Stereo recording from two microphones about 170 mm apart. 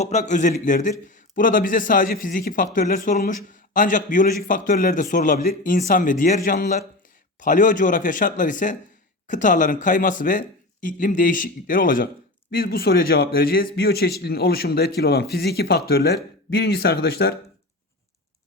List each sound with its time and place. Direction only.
0.0 s speech: 40° left (ahead or behind); by 17.3 s 65° left (ahead or behind)